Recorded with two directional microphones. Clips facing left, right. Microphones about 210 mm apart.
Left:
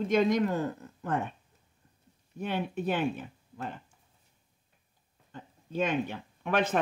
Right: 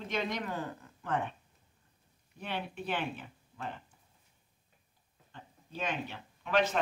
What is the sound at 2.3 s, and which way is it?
Speech, 45° left (ahead or behind).